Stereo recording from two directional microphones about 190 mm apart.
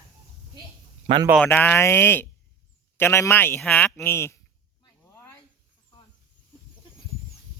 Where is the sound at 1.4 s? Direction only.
10° left (ahead or behind).